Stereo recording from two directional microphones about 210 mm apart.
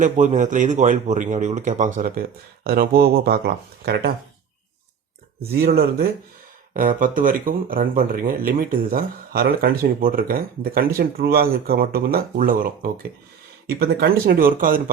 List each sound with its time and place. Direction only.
0.0 s speech: 35° right (ahead or behind)
5.5 s speech: 50° right (ahead or behind)